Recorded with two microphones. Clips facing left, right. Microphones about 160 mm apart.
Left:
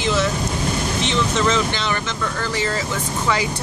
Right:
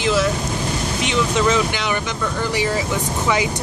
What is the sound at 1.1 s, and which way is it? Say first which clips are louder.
Speech: right 3 dB; 10° right (ahead or behind).